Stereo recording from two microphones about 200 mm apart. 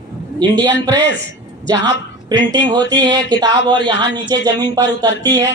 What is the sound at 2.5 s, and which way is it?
A man's voice, 20° right (ahead or behind).